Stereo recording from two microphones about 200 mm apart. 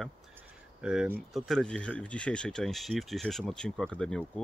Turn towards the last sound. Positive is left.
turn(degrees=5)  # may be behind; listen again after turning